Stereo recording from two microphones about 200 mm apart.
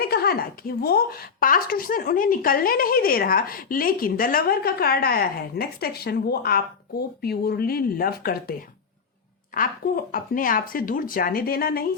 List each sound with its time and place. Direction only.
0.0 s speech: 50° left (ahead or behind)
9.6 s speech: 45° left (ahead or behind)